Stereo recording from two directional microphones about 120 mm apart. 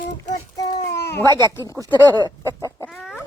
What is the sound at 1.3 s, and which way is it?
Speech, 20° left (ahead or behind).